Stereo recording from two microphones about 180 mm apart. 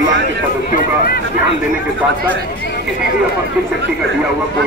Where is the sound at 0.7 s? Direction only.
60° left (ahead or behind).